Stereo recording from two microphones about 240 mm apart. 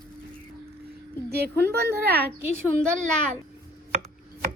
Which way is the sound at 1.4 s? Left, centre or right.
Right.